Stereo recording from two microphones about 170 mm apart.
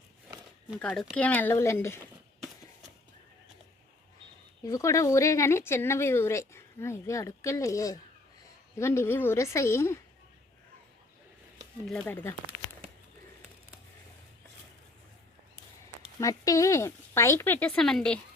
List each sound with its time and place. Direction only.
0.8 s speech: 5° left (ahead or behind)
4.6 s speech: 20° left (ahead or behind)
11.9 s speech: 10° left (ahead or behind)
16.2 s speech: 20° left (ahead or behind); by 18.2 s 5° left (ahead or behind)